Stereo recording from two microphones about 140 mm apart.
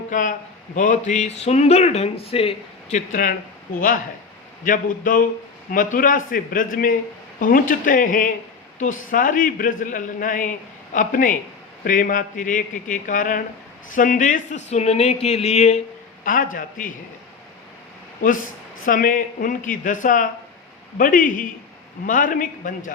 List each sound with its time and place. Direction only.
0.1 s a man's voice: 70° left (ahead or behind); by 2.6 s 45° left (ahead or behind)
2.9 s a man's voice: 70° left (ahead or behind)
4.6 s a man's voice: 75° left (ahead or behind); by 15.8 s 50° left (ahead or behind)
16.2 s a man's voice: 80° left
18.9 s a man's voice: 75° left (ahead or behind)